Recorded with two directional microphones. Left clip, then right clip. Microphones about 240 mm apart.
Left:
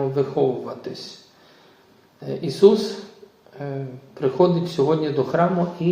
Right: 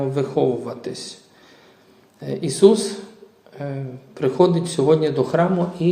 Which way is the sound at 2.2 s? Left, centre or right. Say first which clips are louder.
Even; right.